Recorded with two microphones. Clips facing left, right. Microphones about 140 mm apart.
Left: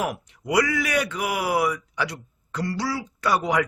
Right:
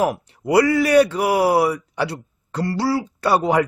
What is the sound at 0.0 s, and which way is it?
A man's voice, 35° right (ahead or behind).